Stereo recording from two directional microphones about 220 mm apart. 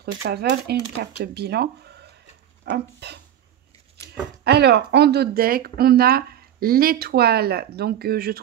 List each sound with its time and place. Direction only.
0.0 s speech: 45° right (ahead or behind)
4.5 s speech: 50° right (ahead or behind)